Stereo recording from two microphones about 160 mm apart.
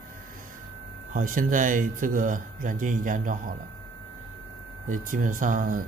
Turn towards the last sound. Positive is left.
turn(degrees=-55)  # may be behind; listen again after turning